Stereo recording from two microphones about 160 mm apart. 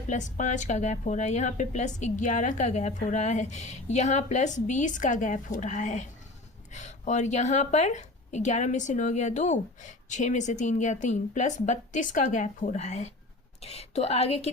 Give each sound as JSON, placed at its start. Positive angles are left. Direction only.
{"t": 0.1, "sound": "a woman's voice", "side_deg": 50}